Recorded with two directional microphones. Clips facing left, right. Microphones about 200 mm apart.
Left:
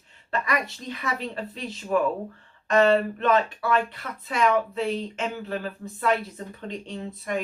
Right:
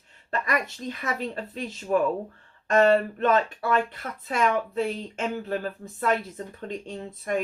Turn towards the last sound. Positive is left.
turn(degrees=-45)  # may be behind; listen again after turning